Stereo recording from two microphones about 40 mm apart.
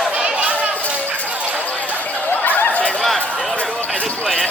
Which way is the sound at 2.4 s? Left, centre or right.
Left.